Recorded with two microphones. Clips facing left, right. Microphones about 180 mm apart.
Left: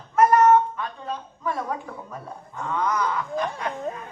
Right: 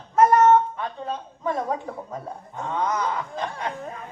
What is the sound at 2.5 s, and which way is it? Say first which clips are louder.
Speech: even; 25° right (ahead or behind).